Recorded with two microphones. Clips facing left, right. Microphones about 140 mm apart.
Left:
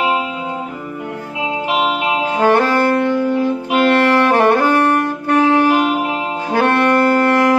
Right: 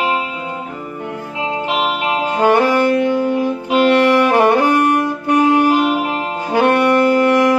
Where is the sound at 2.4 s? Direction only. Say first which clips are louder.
Right 1 dB; 15° right (ahead or behind).